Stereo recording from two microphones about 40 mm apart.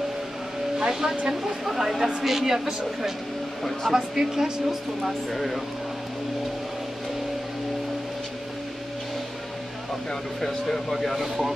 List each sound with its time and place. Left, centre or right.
0.7 s speech: centre
5.3 s speech: centre
10.9 s speech: centre